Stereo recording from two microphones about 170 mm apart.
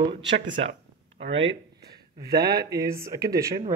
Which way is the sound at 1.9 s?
20° right (ahead or behind).